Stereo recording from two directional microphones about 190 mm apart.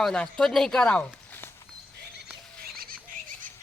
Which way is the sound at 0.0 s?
5° left (ahead or behind).